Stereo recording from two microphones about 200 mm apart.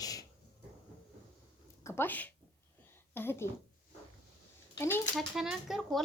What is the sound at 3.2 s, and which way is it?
Speech, 10° left (ahead or behind).